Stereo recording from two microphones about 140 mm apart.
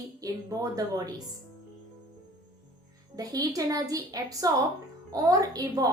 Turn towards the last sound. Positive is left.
turn(degrees=-25)  # may be behind; listen again after turning